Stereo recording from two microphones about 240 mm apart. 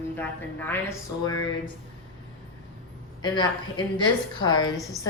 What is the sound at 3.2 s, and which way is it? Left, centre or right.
A woman's voice, centre.